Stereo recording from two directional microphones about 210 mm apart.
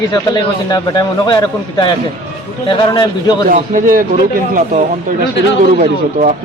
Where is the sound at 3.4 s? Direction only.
40° right (ahead or behind).